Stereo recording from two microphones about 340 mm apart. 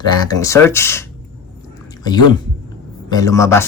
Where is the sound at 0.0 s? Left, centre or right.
Centre.